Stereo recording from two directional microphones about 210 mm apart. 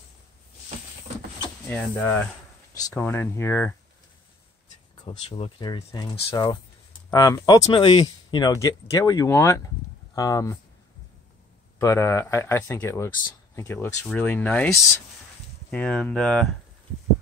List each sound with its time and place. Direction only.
1.7 s speech: 5° left (ahead or behind)
5.3 s speech: 20° left (ahead or behind)
11.8 s speech: 15° left (ahead or behind)